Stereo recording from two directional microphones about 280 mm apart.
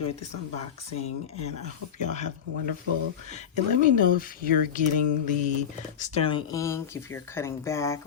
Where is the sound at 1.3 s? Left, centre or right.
Left.